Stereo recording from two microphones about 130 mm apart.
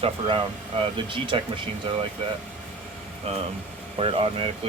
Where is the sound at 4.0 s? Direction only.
45° right (ahead or behind).